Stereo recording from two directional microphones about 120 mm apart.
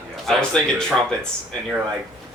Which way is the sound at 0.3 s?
5° left (ahead or behind).